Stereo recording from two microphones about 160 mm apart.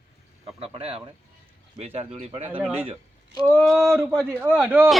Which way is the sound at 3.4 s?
Centre (ahead or behind).